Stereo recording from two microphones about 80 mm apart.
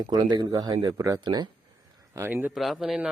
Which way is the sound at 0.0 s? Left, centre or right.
Right.